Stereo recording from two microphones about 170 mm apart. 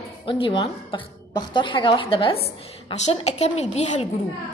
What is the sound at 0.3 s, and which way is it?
A woman's voice, 30° left (ahead or behind).